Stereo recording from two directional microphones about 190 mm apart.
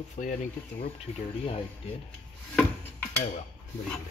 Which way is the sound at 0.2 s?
40° left (ahead or behind).